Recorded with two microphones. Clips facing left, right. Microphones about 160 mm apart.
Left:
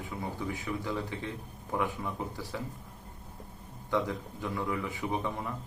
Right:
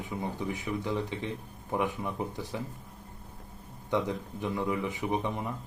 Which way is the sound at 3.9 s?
20° right (ahead or behind).